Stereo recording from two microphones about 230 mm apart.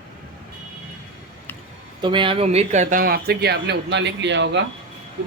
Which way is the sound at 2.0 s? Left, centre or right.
Right.